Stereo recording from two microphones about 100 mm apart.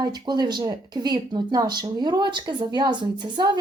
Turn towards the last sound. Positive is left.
turn(degrees=-50)  # may be behind; listen again after turning